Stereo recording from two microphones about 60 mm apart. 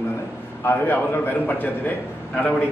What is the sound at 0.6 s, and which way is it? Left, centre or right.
A man's voice, left.